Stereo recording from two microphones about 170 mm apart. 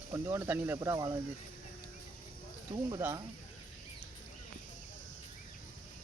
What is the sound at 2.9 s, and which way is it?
Speech, 15° right (ahead or behind).